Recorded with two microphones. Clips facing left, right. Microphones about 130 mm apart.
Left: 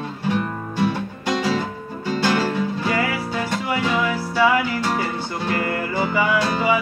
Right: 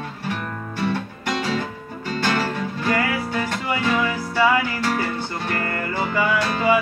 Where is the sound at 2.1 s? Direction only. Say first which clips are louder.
Left 3 dB; 15° left (ahead or behind).